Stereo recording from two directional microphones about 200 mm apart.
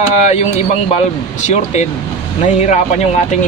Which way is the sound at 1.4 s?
35° left (ahead or behind).